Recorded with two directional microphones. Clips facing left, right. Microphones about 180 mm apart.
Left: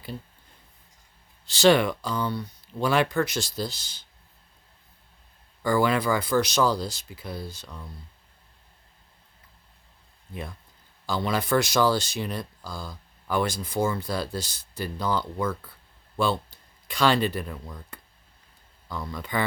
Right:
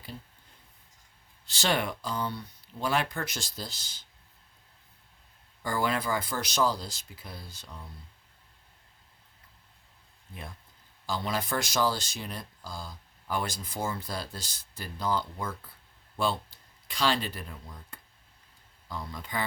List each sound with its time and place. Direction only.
1.5 s speech: 80° left
5.6 s speech: 80° left
11.0 s speech: 70° left (ahead or behind)
16.9 s speech: 55° left (ahead or behind)
18.9 s speech: 75° left (ahead or behind)